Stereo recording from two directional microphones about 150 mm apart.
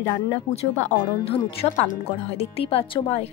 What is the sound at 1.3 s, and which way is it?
A woman's voice, 40° left (ahead or behind).